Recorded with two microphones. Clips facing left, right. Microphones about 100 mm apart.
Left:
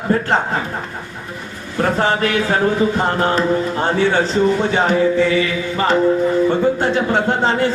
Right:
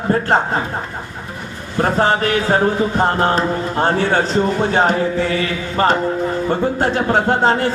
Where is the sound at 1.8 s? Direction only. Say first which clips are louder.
Right 1 dB; 35° right (ahead or behind).